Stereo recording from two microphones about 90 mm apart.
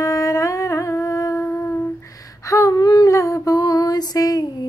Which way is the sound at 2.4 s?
35° left (ahead or behind).